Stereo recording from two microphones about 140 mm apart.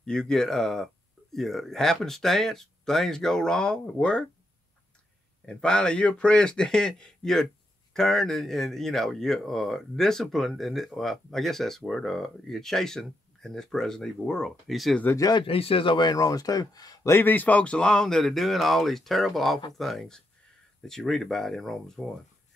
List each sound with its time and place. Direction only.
0.0 s speech: 5° left (ahead or behind)
5.4 s a man's voice: 5° left (ahead or behind)
15.0 s speech: 25° left (ahead or behind)
15.4 s a man's voice: 40° left (ahead or behind); by 22.0 s 5° left (ahead or behind)